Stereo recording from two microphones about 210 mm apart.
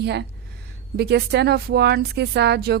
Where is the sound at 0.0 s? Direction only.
55° right (ahead or behind).